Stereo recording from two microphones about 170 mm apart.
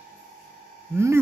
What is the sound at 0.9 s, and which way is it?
Speech, 15° right (ahead or behind).